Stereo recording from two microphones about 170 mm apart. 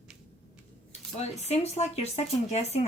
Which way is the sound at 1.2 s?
40° left (ahead or behind).